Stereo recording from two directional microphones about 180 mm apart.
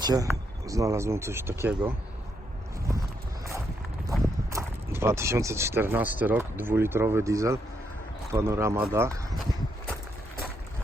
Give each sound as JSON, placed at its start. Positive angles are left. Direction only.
{"t": 0.0, "sound": "speech", "side_deg": -20}
{"t": 4.5, "sound": "speech", "side_deg": -15}